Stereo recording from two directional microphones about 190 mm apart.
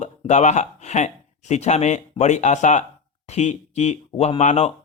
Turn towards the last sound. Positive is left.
turn(degrees=35)  # may be behind; listen again after turning